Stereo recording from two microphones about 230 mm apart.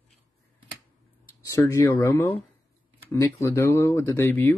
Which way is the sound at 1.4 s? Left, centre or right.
Centre.